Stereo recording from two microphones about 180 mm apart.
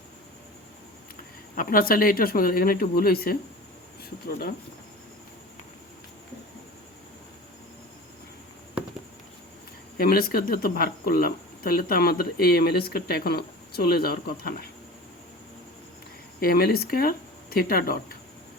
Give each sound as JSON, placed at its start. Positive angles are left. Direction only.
{"t": 1.5, "sound": "speech", "side_deg": 50}
{"t": 10.0, "sound": "speech", "side_deg": 55}
{"t": 16.4, "sound": "speech", "side_deg": 55}